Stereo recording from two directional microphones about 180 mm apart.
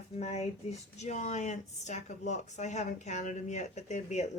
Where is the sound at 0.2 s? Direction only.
40° left (ahead or behind).